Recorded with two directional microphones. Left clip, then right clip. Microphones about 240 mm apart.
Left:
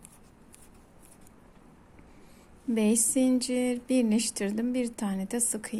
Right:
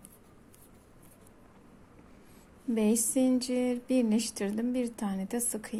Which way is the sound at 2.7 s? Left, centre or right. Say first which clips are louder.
Left 2 dB; centre.